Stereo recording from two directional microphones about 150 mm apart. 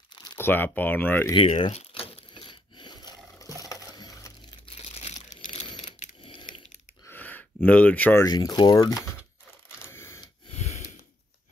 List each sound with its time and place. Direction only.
0.1 s crumpling: 30° left (ahead or behind)
0.4 s speech: 15° left (ahead or behind)
1.3 s crumpling: 35° left (ahead or behind)
3.6 s a sound: 25° left (ahead or behind)
4.6 s crumpling: 40° left (ahead or behind)
5.8 s mechanisms: 55° left (ahead or behind)
7.1 s a sound: 10° left (ahead or behind)
8.3 s speech: 25° left (ahead or behind)
9.8 s a sound: 20° left (ahead or behind)
10.5 s gasp: 45° left (ahead or behind)